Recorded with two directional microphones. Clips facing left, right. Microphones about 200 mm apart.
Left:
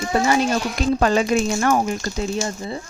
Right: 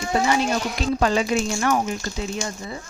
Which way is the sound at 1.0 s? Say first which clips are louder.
Left 2 dB; 50° left (ahead or behind).